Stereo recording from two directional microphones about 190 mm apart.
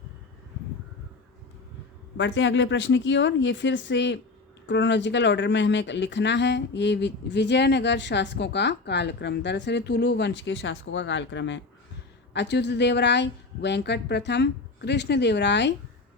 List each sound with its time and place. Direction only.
2.1 s speech: 70° left (ahead or behind)